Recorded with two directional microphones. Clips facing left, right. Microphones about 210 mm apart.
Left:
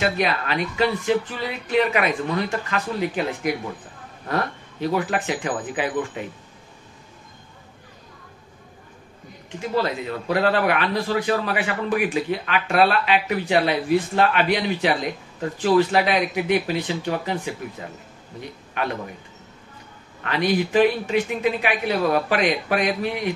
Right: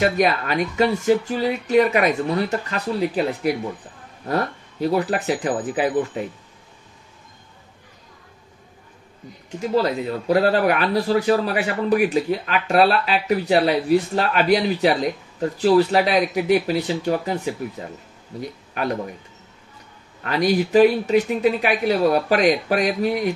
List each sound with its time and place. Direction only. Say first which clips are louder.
0.0 s speech: right 4 dB; 45° right (ahead or behind)
4.3 s speech: right 2 dB; 40° right (ahead or behind)
9.6 s speech: right 3 dB; 35° right (ahead or behind)
20.2 s speech: right 2 dB; 40° right (ahead or behind)